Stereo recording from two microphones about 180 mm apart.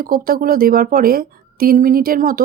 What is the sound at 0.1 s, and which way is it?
Speech, 55° right (ahead or behind).